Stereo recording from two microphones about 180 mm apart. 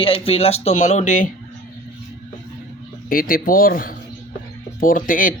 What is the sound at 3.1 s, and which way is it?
Speech, 55° left (ahead or behind).